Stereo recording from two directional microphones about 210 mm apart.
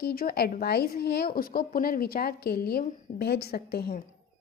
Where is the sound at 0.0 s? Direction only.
45° left (ahead or behind).